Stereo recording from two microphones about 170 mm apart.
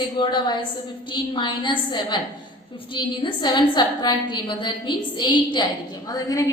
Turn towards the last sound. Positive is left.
turn(degrees=20)  # may be behind; listen again after turning